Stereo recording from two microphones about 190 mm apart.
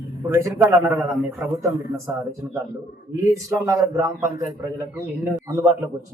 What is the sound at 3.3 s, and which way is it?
A man's voice, 15° right (ahead or behind).